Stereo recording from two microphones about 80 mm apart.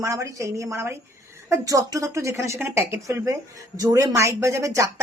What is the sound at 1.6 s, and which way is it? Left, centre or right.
Speech, right.